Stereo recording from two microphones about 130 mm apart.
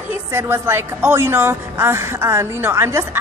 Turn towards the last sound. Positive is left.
turn(degrees=-20)  # may be behind; listen again after turning